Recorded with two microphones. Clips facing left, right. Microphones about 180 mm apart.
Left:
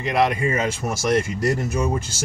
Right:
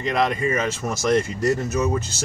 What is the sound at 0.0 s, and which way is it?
Speech, 10° left (ahead or behind).